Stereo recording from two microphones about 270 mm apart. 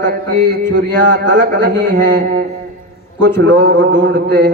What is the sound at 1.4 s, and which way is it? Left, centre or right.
Mantra, right.